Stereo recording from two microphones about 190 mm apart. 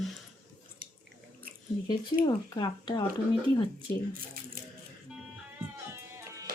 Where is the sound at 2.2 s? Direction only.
20° left (ahead or behind).